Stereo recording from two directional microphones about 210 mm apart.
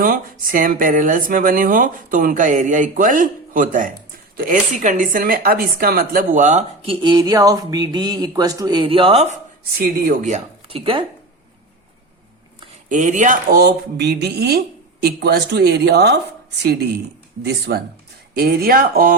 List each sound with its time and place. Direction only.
0.0 s speech: 40° right (ahead or behind)
7.0 s speech: 20° right (ahead or behind)
12.9 s speech: 35° right (ahead or behind); by 16.2 s 50° right (ahead or behind)
17.4 s speech: 50° right (ahead or behind)